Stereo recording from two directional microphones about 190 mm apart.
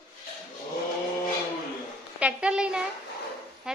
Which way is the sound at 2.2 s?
5° right (ahead or behind).